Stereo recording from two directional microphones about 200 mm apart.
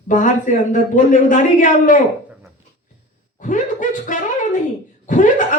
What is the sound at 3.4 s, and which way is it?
A woman's voice, 40° left (ahead or behind).